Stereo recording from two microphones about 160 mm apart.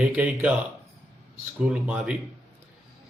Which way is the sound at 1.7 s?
5° right (ahead or behind).